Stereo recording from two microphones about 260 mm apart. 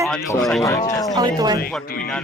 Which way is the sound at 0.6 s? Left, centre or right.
Centre.